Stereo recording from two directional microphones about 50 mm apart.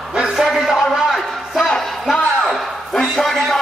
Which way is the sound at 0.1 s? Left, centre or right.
Centre.